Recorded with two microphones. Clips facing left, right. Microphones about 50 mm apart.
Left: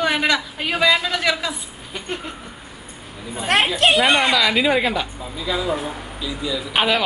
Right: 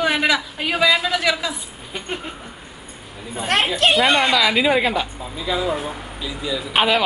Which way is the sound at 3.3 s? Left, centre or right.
Centre.